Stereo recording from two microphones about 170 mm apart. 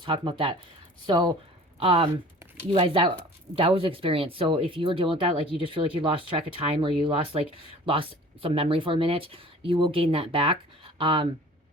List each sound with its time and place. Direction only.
0.0 s speech: 30° right (ahead or behind)